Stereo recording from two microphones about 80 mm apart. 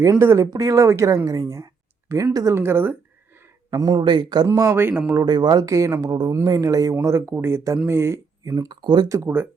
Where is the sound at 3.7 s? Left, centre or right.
Right.